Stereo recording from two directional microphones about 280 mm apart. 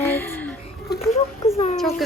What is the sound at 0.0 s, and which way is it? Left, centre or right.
Music, centre.